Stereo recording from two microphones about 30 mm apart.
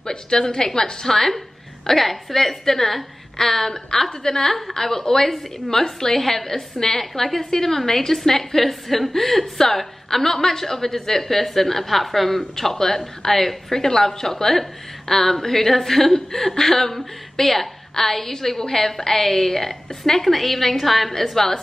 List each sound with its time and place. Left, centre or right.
0.0 s a woman's voice: left